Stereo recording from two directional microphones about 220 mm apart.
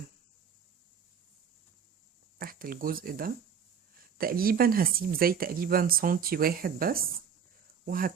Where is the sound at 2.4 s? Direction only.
40° right (ahead or behind).